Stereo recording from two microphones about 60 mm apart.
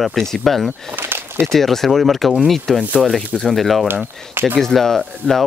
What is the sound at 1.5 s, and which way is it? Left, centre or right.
Speech, centre.